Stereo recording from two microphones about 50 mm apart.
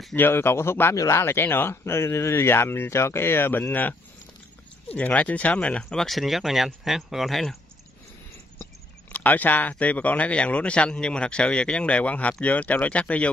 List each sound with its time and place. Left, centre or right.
0.1 s speech: left
4.9 s speech: left
5.9 s speech: centre
9.1 s speech: left